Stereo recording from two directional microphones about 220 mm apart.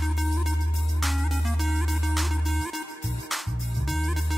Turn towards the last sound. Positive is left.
turn(degrees=0)  # may be behind; listen again after turning